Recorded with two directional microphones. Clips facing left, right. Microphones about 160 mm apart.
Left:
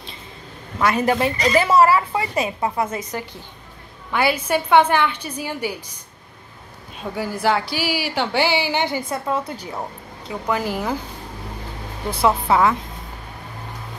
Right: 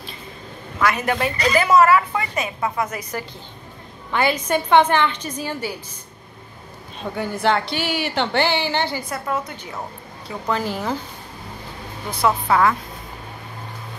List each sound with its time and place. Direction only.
0.7 s a woman's voice: 25° left (ahead or behind)
4.1 s a woman's voice: 10° left (ahead or behind)
7.0 s a woman's voice: 5° left (ahead or behind); by 9.7 s 30° left (ahead or behind)
9.8 s speech: 15° left (ahead or behind)
12.4 s a woman's voice: 20° left (ahead or behind)